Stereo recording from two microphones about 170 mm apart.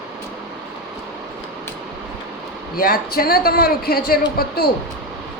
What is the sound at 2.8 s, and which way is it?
A man's voice, 60° left (ahead or behind).